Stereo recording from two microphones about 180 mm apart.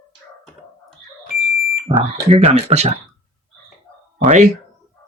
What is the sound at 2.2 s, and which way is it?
Speech, 35° right (ahead or behind).